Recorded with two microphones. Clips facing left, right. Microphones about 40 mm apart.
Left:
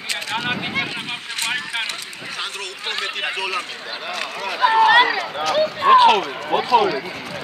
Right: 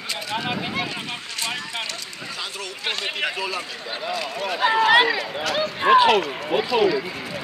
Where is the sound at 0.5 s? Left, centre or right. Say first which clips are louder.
Left 3 dB; centre.